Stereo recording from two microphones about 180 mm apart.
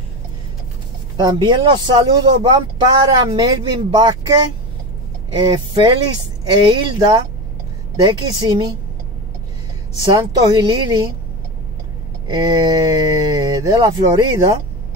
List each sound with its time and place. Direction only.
1.1 s speech: 25° right (ahead or behind)
10.0 s speech: 25° right (ahead or behind)
12.4 s speech: 20° right (ahead or behind)